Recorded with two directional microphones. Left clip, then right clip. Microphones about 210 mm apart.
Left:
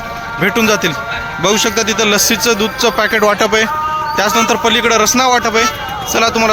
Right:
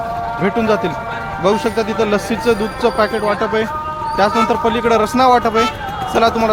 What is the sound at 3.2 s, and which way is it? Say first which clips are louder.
A man's voice: left 5 dB; 15° left (ahead or behind).